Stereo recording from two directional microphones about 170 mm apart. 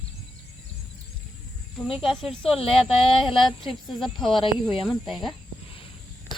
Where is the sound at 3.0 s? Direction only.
30° left (ahead or behind).